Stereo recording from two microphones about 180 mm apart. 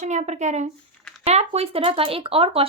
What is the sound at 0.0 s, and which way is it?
A woman's voice, 40° right (ahead or behind).